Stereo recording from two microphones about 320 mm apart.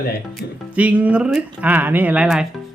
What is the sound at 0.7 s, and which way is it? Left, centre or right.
Speech, centre.